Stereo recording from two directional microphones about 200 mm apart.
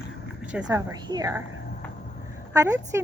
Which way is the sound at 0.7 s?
20° right (ahead or behind).